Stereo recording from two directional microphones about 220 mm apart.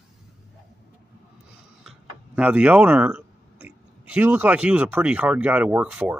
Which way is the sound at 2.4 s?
5° right (ahead or behind).